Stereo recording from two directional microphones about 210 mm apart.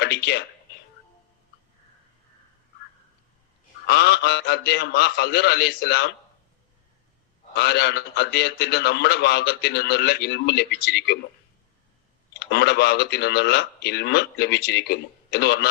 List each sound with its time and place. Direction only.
0.0 s speech: 50° left (ahead or behind)
3.8 s a man's voice: 50° left (ahead or behind)
7.5 s a man's voice: 50° left (ahead or behind)
12.3 s a man's voice: 55° left (ahead or behind)